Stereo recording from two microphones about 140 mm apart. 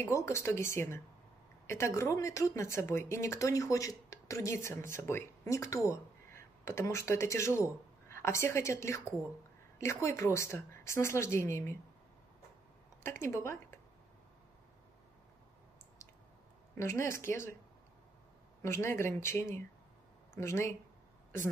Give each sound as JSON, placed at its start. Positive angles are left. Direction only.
{"t": 0.0, "sound": "speech", "side_deg": 20}
{"t": 13.2, "sound": "speech", "side_deg": 20}
{"t": 16.7, "sound": "speech", "side_deg": 20}
{"t": 18.6, "sound": "speech", "side_deg": 20}